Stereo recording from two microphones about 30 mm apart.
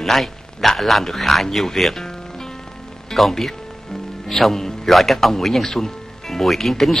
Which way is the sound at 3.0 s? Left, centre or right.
Centre.